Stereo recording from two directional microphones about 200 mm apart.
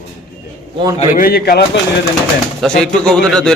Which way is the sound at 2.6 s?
5° left (ahead or behind).